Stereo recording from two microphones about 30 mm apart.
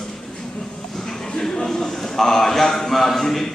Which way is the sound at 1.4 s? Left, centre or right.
Centre.